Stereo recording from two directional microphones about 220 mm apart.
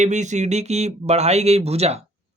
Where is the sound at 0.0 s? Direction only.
35° right (ahead or behind).